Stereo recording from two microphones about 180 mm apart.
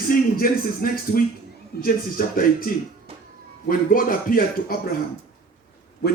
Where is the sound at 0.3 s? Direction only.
55° left (ahead or behind).